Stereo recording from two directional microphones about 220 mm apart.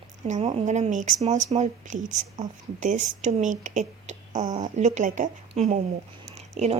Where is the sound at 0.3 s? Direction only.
30° right (ahead or behind).